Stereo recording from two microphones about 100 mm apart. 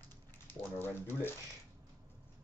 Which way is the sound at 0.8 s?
20° left (ahead or behind).